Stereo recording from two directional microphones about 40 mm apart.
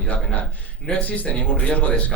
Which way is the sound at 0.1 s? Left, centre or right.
Left.